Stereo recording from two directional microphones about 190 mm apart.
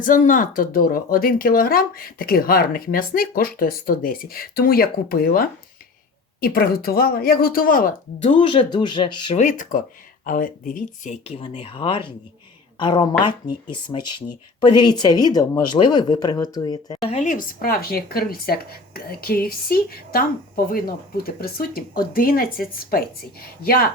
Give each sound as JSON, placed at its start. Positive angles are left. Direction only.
{"t": 0.0, "sound": "speech", "side_deg": 45}
{"t": 8.3, "sound": "speech", "side_deg": 25}
{"t": 9.3, "sound": "speech", "side_deg": 40}